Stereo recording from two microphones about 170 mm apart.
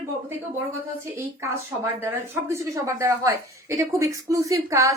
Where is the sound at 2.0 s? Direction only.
15° right (ahead or behind).